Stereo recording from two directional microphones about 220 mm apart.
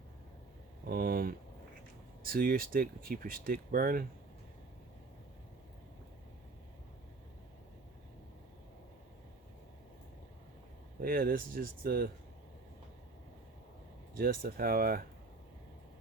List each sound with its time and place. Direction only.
0.9 s speech: 40° right (ahead or behind)
11.0 s speech: 40° right (ahead or behind)
14.2 s speech: 40° right (ahead or behind)